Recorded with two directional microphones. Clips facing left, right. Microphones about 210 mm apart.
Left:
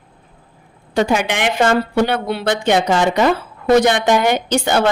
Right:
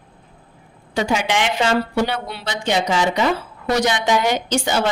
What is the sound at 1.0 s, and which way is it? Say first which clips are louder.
A woman's voice: left 3 dB; 55° left (ahead or behind).